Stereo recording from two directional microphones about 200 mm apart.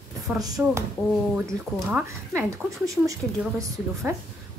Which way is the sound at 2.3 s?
15° right (ahead or behind).